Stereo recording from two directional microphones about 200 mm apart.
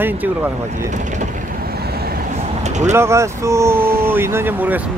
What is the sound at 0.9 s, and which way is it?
Mechanisms, 40° right (ahead or behind).